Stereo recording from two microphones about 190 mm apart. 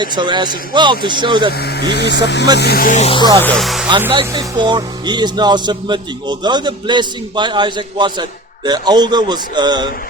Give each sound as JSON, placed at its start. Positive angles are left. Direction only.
{"t": 0.0, "sound": "speech", "side_deg": -25}
{"t": 1.5, "sound": "speech", "side_deg": 60}
{"t": 3.4, "sound": "speech", "side_deg": 0}
{"t": 4.1, "sound": "speech", "side_deg": -25}